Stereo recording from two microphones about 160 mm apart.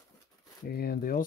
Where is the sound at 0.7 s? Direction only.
70° left (ahead or behind).